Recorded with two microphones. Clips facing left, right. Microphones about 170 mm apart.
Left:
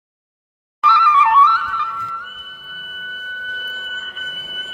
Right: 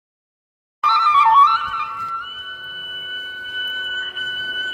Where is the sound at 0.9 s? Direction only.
25° right (ahead or behind).